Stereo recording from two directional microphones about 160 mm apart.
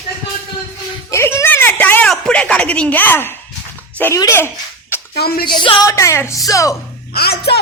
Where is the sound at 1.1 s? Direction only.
15° left (ahead or behind).